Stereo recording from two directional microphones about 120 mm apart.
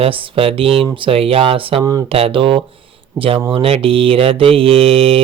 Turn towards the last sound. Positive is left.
turn(degrees=-50)  # may be behind; listen again after turning